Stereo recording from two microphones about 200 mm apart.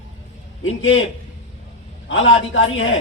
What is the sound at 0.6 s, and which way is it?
Speech, 75° left (ahead or behind).